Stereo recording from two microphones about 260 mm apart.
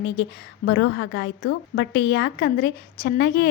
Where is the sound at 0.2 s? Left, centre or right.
Left.